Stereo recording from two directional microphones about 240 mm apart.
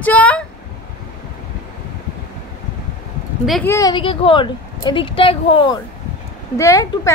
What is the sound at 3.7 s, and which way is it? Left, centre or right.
A woman's voice, centre.